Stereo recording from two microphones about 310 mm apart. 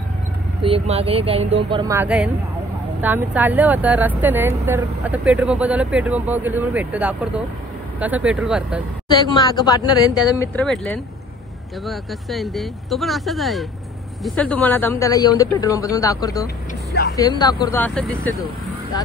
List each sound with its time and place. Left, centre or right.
0.6 s speech: centre
9.1 s speech: centre